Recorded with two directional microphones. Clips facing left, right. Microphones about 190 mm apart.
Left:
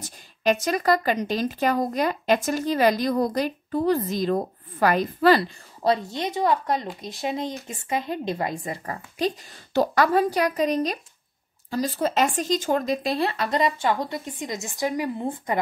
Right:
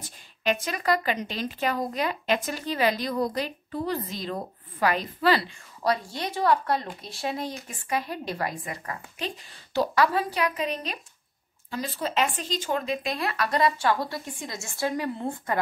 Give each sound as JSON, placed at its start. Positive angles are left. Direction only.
{"t": 0.0, "sound": "a woman's voice", "side_deg": 40}
{"t": 5.8, "sound": "speech", "side_deg": 25}
{"t": 9.8, "sound": "speech", "side_deg": 45}